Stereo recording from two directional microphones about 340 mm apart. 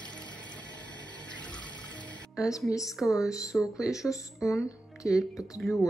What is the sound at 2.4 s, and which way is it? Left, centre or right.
Speech, centre.